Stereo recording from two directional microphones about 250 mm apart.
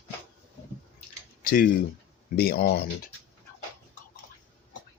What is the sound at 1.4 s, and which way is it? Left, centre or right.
Speech, left.